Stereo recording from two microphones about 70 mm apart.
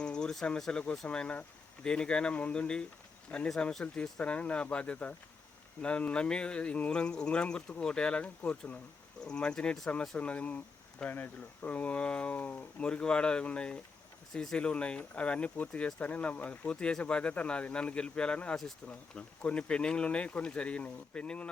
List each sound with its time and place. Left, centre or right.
0.0 s speech: centre